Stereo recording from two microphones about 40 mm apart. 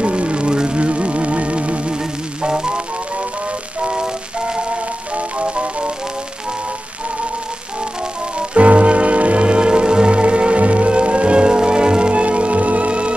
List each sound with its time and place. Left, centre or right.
0.0 s music: right
3.8 s music: right
8.4 s music: right